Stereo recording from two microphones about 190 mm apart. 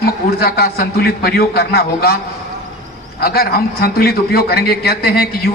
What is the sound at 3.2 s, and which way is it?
A man's voice, 50° left (ahead or behind).